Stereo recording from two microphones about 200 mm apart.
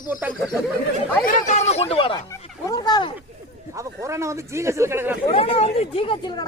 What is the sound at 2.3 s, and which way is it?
Speech, 15° left (ahead or behind).